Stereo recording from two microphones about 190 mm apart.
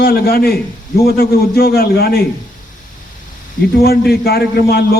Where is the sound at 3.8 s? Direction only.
55° left (ahead or behind).